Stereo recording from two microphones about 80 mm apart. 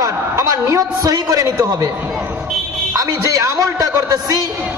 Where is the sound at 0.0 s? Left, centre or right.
Right.